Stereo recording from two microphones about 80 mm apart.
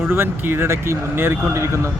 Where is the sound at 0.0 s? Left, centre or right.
Right.